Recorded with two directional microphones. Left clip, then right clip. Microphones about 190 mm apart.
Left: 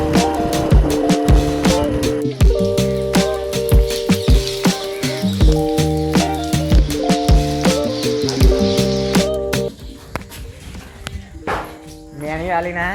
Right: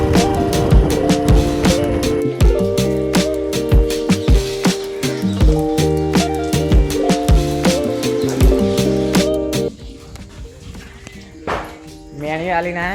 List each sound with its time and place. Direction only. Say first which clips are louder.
0.1 s music: right 1 dB; centre (ahead or behind)
12.2 s music: right 1 dB; 15° right (ahead or behind)